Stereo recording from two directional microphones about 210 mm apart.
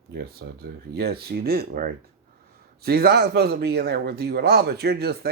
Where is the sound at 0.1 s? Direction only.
50° right (ahead or behind).